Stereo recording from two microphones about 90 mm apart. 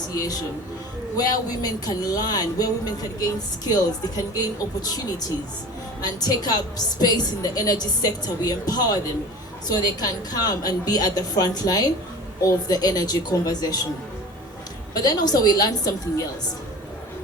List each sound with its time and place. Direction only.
0.1 s speech: 45° left (ahead or behind)
14.9 s speech: 45° left (ahead or behind)